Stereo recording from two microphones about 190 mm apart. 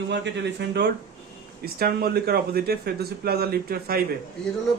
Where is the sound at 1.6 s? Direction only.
50° right (ahead or behind).